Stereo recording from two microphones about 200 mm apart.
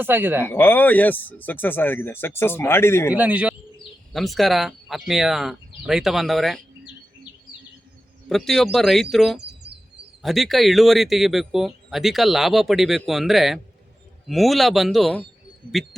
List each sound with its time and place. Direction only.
0.0 s speech: 10° right (ahead or behind)
0.4 s speech: 10° left (ahead or behind)
3.2 s speech: 5° right (ahead or behind)
8.3 s speech: centre (ahead or behind)
9.4 s chirp: 55° right (ahead or behind)
10.2 s speech: centre (ahead or behind)